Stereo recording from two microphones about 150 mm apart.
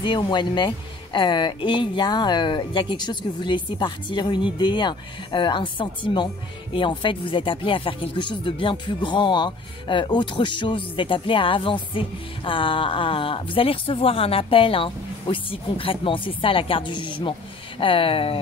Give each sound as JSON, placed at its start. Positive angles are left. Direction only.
{"t": 0.0, "sound": "speech", "side_deg": 30}